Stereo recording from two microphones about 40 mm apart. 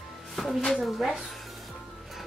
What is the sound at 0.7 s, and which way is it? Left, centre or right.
Speech, centre.